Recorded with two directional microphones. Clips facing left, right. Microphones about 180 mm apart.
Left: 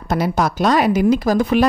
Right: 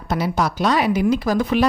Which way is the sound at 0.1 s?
45° left (ahead or behind).